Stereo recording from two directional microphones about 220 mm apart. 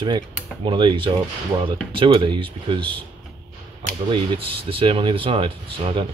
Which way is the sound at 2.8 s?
5° left (ahead or behind).